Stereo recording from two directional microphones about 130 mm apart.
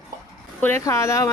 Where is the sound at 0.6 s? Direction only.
20° left (ahead or behind).